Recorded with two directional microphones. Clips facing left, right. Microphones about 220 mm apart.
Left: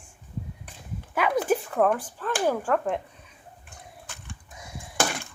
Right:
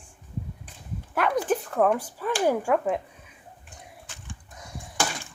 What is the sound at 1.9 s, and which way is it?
Speech, 10° right (ahead or behind).